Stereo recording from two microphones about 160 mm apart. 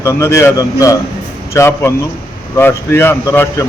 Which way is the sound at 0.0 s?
20° left (ahead or behind).